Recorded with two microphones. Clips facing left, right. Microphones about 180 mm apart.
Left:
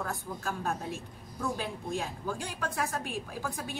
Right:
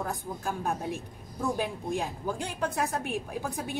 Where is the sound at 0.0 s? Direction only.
15° right (ahead or behind).